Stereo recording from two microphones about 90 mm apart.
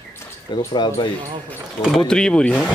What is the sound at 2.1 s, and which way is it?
Speech, 10° left (ahead or behind).